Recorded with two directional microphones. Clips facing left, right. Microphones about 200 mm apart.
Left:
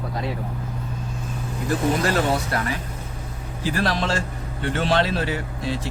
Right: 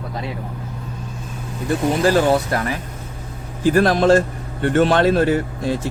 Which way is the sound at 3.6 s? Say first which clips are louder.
Right 9 dB; 50° right (ahead or behind).